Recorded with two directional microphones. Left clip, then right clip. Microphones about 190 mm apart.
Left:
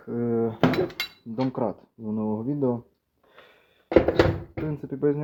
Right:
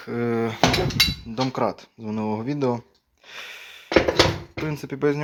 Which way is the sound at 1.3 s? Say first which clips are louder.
Right 3 dB; 30° right (ahead or behind).